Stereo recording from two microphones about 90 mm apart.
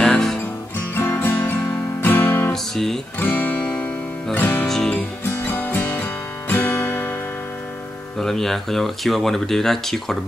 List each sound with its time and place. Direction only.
0.0 s music: 5° left (ahead or behind)
0.9 s guitar: 25° left (ahead or behind)
2.5 s guitar: 5° left (ahead or behind)
3.2 s music: 20° left (ahead or behind)
4.6 s music: 10° left (ahead or behind)
5.2 s music: 20° left (ahead or behind)
8.2 s speech: 5° left (ahead or behind)